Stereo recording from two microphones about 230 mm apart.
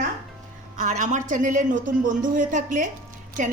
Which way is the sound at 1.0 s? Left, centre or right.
Right.